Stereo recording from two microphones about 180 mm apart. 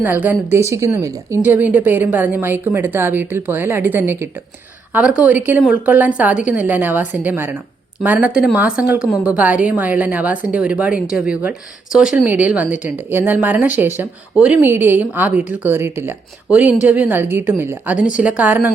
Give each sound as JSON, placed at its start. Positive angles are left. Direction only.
{"t": 0.0, "sound": "a woman's voice", "side_deg": -10}